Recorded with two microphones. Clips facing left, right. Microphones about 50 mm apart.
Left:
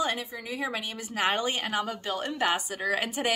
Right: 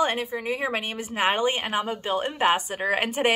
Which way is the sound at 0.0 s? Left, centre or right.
Right.